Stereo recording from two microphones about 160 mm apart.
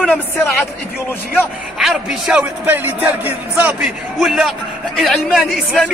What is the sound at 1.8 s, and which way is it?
A man's voice, centre (ahead or behind).